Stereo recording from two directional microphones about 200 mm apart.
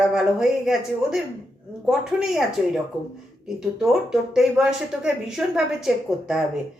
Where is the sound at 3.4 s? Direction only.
Centre (ahead or behind).